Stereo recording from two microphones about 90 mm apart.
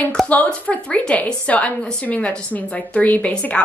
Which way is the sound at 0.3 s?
15° left (ahead or behind).